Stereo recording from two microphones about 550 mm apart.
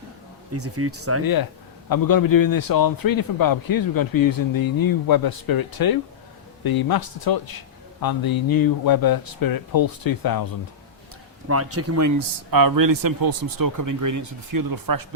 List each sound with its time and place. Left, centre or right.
0.5 s speech: right
1.2 s a man's voice: left
11.4 s speech: right